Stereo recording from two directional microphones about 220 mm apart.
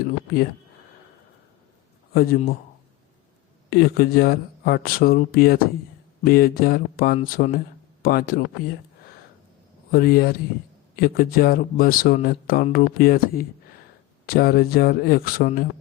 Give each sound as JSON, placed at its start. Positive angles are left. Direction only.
{"t": 0.0, "sound": "speech", "side_deg": 40}
{"t": 2.1, "sound": "speech", "side_deg": 45}
{"t": 3.7, "sound": "speech", "side_deg": 45}
{"t": 9.9, "sound": "speech", "side_deg": 45}